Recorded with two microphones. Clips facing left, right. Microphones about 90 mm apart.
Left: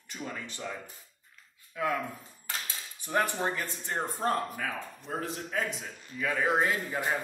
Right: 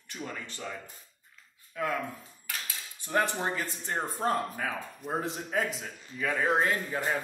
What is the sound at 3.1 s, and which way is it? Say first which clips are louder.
A man's voice: even; centre (ahead or behind).